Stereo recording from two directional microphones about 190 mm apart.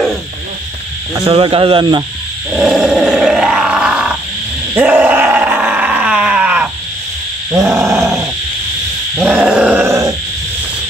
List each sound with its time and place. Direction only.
1.1 s speech: 25° right (ahead or behind)
2.5 s grunt: 5° right (ahead or behind)
4.7 s groan: 10° right (ahead or behind)
7.5 s a sound: 15° right (ahead or behind)
9.2 s grunt: 5° right (ahead or behind)